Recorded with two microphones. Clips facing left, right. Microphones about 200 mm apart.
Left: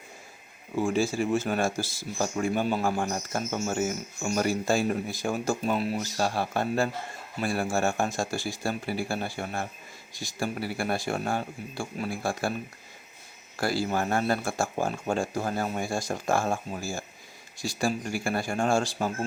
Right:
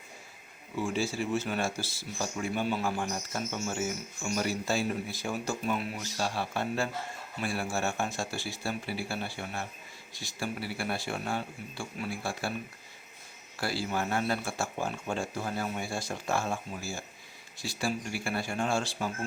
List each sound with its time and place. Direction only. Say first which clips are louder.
0.8 s speech: left 5 dB; 45° left (ahead or behind)
13.6 s speech: left 5 dB; 45° left (ahead or behind)